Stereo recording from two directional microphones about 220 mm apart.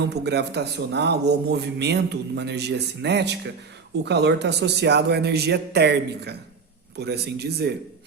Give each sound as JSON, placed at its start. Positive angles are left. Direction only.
{"t": 0.0, "sound": "a man's voice", "side_deg": -50}